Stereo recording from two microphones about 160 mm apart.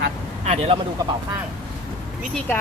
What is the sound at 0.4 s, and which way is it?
Speech, 45° right (ahead or behind).